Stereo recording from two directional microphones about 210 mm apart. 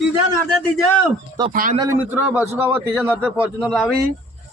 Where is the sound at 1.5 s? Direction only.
40° right (ahead or behind).